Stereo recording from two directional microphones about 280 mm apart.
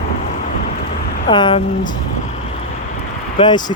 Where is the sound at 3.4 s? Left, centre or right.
Centre.